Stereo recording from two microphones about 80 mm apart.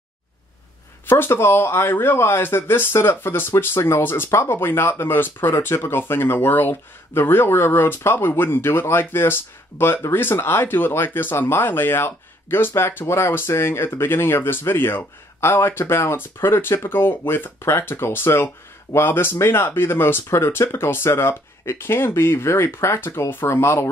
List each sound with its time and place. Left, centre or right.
1.0 s speech: left